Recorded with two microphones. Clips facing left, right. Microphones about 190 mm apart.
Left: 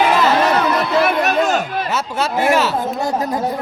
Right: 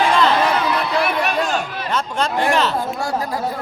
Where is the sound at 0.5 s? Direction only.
45° left (ahead or behind).